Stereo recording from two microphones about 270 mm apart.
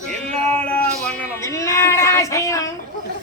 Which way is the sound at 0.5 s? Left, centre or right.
Centre.